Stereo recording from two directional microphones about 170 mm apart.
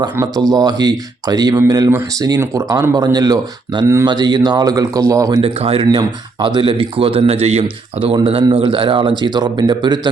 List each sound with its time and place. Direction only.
0.4 s speech: 20° right (ahead or behind)
5.4 s speech: 30° right (ahead or behind)